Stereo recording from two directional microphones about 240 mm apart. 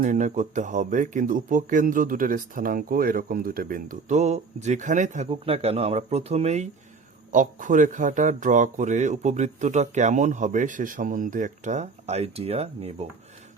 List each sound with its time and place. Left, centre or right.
0.0 s speech: right